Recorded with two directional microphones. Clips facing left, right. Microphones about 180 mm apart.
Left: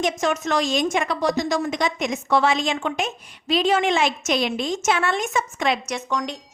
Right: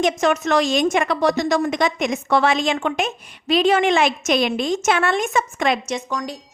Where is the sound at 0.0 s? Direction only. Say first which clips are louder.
Right 4 dB; 65° right (ahead or behind).